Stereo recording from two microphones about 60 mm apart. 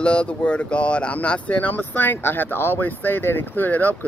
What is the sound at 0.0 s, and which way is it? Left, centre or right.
Speech, centre.